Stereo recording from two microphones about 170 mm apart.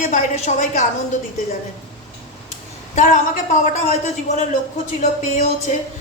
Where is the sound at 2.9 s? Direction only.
45° left (ahead or behind).